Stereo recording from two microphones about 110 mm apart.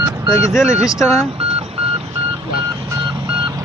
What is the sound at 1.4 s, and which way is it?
Car alarm, 65° right (ahead or behind).